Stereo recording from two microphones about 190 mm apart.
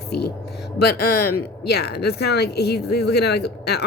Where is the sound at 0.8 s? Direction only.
55° left (ahead or behind).